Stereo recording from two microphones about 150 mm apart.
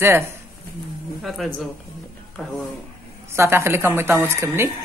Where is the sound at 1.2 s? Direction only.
Centre (ahead or behind).